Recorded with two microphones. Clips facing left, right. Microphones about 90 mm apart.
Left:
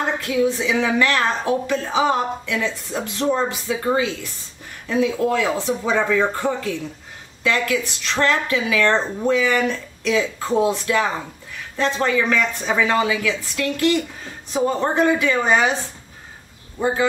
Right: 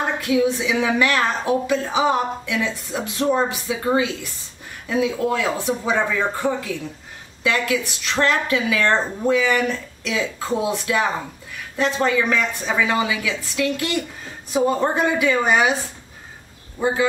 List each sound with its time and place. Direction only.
0.2 s a woman's voice: 15° right (ahead or behind)
7.4 s a woman's voice: 15° right (ahead or behind)
16.8 s a woman's voice: 15° right (ahead or behind)